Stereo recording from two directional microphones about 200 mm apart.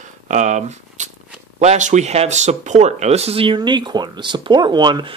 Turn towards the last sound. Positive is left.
turn(degrees=-20)  # may be behind; listen again after turning